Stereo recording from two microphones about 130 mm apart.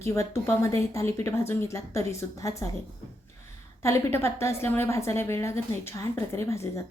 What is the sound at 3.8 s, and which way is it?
A woman's voice, 20° left (ahead or behind).